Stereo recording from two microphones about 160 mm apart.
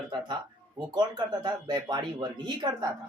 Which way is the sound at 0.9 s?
25° right (ahead or behind).